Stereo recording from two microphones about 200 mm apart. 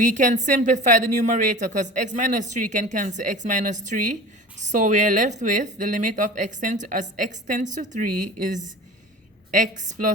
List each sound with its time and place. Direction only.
0.0 s a woman's voice: 40° right (ahead or behind)